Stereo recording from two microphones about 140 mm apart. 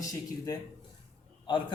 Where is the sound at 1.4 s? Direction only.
35° left (ahead or behind).